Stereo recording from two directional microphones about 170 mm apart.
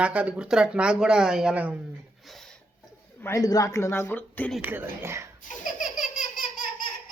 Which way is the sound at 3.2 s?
20° left (ahead or behind).